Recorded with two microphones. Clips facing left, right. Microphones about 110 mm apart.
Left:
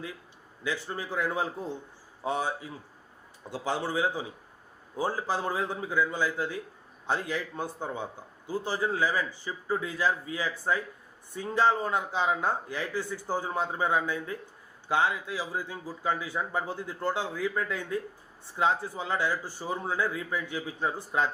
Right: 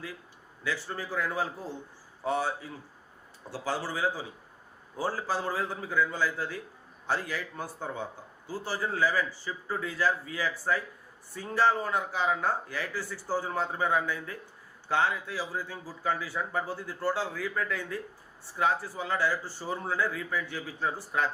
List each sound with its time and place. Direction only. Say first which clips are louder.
0.6 s a man's voice: left 1 dB; 20° left (ahead or behind)